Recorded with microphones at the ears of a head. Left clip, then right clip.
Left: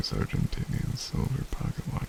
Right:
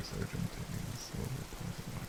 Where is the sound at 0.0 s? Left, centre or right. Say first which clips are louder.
Left 9 dB; left.